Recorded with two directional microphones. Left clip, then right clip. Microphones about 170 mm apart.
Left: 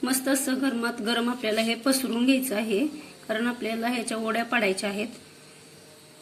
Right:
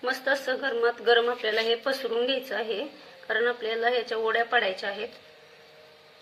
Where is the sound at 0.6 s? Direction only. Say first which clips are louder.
Right 2 dB; 30° left (ahead or behind).